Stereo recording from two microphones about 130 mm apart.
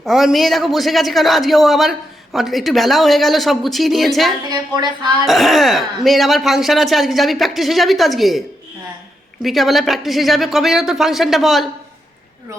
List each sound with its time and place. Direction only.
0.0 s a man's voice: centre (ahead or behind)
4.4 s a woman's voice: 30° right (ahead or behind)
5.2 s a man's voice: centre (ahead or behind)
9.4 s a man's voice: centre (ahead or behind)